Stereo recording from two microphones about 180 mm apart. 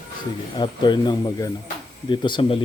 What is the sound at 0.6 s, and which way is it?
A man's voice, 25° left (ahead or behind).